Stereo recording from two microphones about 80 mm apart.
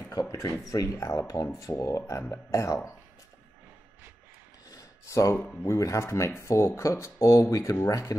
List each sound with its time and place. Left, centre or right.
0.1 s speech: left
4.6 s a sound: left
5.6 s speech: left